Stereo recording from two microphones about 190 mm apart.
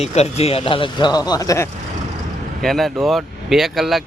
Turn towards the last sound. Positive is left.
turn(degrees=0)  # may be behind; listen again after turning